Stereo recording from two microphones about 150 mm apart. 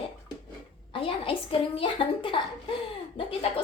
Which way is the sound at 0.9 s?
35° left (ahead or behind).